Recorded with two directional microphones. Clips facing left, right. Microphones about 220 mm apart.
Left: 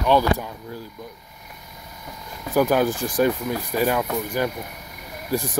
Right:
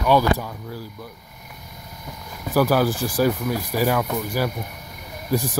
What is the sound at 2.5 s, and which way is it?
Speech, 15° left (ahead or behind).